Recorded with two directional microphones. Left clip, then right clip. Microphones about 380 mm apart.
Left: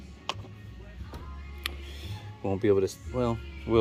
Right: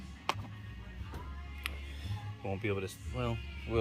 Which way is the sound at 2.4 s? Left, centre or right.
Left.